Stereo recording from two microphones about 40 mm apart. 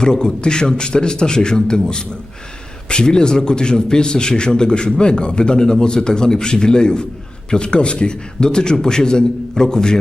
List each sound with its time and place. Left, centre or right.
0.0 s a man's voice: centre